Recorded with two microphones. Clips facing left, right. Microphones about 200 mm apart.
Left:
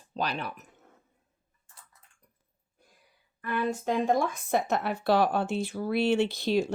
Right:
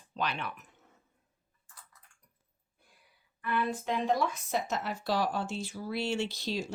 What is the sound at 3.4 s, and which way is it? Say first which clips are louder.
Speech: left 3 dB; 45° left (ahead or behind).